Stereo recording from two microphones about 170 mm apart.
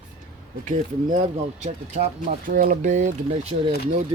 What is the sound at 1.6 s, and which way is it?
Speech, 40° right (ahead or behind).